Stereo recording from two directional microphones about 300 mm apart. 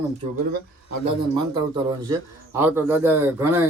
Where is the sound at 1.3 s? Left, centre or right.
Centre.